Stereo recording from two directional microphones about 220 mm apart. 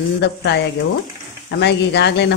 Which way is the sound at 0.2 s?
50° left (ahead or behind).